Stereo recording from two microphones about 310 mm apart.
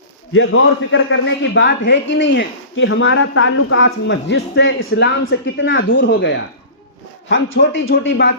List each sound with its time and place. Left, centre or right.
0.3 s a man's voice: left